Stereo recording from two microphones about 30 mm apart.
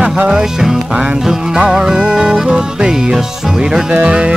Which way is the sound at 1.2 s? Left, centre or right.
Centre.